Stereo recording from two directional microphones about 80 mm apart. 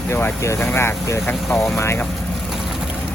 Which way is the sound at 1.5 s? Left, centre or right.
Centre.